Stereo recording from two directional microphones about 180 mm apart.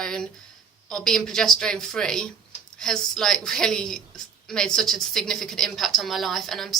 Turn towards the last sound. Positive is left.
turn(degrees=0)  # may be behind; listen again after turning